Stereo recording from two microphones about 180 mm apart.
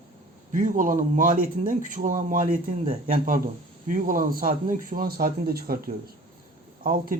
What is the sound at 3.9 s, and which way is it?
Speech, 50° right (ahead or behind).